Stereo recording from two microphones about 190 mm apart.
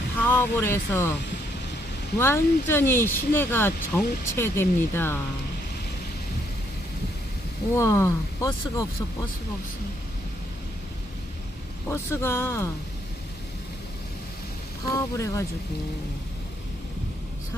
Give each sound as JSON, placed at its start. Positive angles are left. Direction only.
{"t": 0.2, "sound": "speech", "side_deg": 10}
{"t": 2.1, "sound": "speech", "side_deg": 15}
{"t": 7.8, "sound": "speech", "side_deg": 15}
{"t": 11.9, "sound": "speech", "side_deg": 15}
{"t": 14.9, "sound": "speech", "side_deg": 15}